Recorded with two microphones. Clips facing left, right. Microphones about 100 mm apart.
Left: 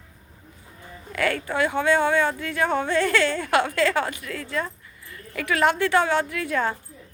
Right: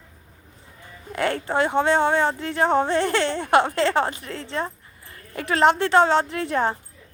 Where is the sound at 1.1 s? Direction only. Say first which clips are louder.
Right 2 dB; 25° right (ahead or behind).